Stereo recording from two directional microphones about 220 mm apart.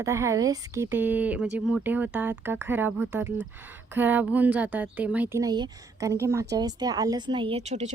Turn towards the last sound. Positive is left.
turn(degrees=-30)  # may be behind; listen again after turning